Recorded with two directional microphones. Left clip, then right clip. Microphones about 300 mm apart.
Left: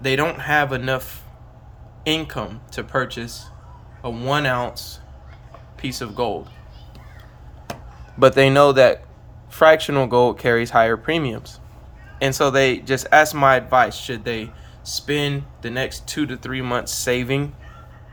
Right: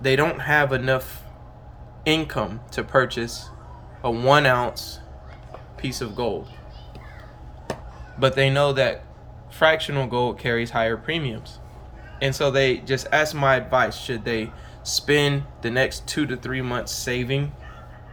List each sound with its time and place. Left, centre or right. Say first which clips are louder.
0.0 s speech: even; centre
8.2 s speech: left 7 dB; centre